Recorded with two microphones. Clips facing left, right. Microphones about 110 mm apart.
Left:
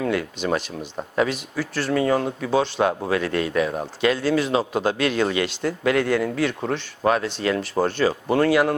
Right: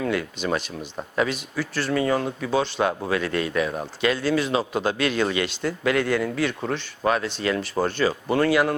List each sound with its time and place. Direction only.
0.0 s speech: 55° left (ahead or behind)